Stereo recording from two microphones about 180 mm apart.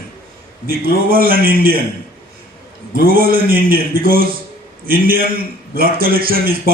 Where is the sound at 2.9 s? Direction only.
55° right (ahead or behind).